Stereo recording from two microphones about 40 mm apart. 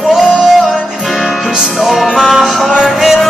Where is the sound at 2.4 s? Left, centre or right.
Centre.